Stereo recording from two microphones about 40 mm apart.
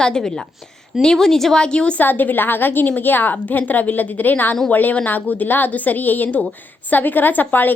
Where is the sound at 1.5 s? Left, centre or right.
Left.